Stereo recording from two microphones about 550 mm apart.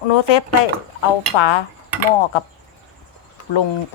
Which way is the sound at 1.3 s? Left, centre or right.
Left.